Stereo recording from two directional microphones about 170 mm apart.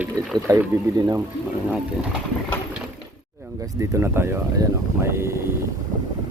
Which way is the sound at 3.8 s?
15° right (ahead or behind).